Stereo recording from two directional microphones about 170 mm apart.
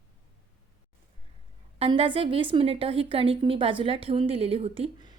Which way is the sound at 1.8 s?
30° right (ahead or behind).